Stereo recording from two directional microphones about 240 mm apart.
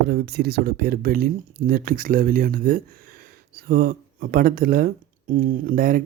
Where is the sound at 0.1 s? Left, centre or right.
Right.